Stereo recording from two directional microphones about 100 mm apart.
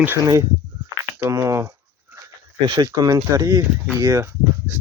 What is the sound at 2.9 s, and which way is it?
Speech, 35° right (ahead or behind).